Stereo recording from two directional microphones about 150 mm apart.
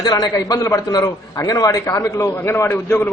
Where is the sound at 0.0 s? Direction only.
25° left (ahead or behind).